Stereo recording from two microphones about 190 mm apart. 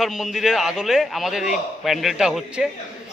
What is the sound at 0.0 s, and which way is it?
Speech, centre (ahead or behind).